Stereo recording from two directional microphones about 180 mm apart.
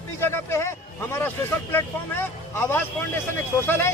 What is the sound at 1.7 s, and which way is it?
Speech, 10° left (ahead or behind).